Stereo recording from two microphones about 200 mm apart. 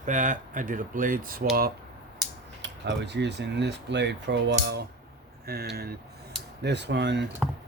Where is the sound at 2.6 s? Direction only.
60° right (ahead or behind).